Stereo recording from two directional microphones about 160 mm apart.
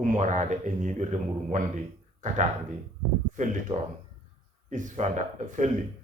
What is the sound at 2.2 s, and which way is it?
A man's voice, 50° right (ahead or behind).